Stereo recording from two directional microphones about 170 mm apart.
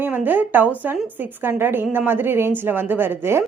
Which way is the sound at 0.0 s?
10° right (ahead or behind).